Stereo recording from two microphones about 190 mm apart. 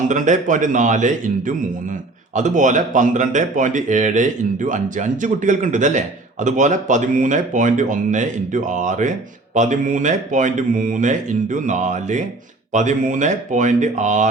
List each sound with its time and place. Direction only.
0.1 s speech: 40° right (ahead or behind)